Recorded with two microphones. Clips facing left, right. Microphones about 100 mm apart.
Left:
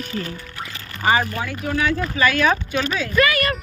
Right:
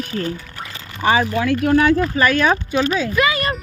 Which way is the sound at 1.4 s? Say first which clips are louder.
Right 10 dB; 90° right.